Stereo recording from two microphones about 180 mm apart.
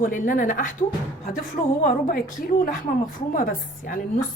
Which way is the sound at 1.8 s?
50° left (ahead or behind).